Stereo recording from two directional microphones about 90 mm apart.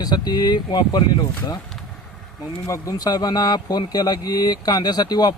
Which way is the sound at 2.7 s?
40° left (ahead or behind).